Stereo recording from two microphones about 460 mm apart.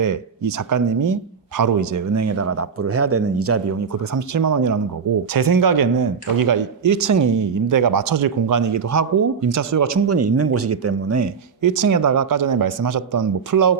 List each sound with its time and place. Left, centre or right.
0.0 s speech: right